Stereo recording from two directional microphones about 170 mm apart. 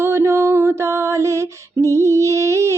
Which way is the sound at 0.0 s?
15° right (ahead or behind).